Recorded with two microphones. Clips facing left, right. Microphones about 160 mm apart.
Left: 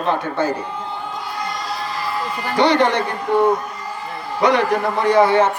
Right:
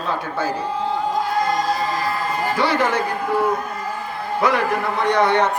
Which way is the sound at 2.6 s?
5° right (ahead or behind).